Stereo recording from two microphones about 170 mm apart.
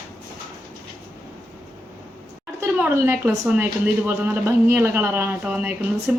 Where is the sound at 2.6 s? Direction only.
10° right (ahead or behind).